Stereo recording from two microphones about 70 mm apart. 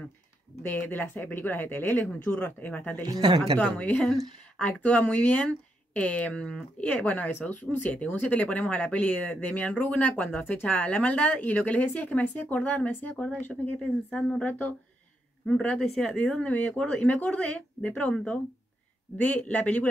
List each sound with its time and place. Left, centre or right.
0.6 s speech: left
3.0 s speech: right
3.6 s speech: left
13.7 s speech: centre
14.4 s speech: left
15.4 s speech: centre
16.5 s speech: left